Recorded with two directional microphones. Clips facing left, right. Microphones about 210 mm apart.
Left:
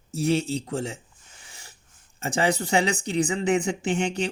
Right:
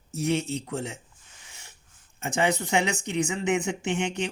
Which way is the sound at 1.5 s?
35° left (ahead or behind).